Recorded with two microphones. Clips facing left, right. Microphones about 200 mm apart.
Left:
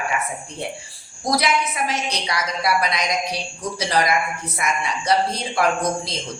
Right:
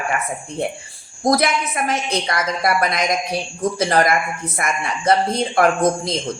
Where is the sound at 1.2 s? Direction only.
50° right (ahead or behind).